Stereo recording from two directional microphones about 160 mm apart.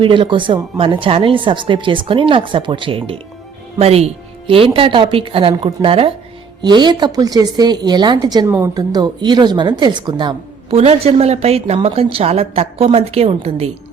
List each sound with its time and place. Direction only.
0.0 s a woman's voice: 30° right (ahead or behind)
8.4 s a woman's voice: 15° right (ahead or behind)
8.7 s a woman's voice: 25° right (ahead or behind)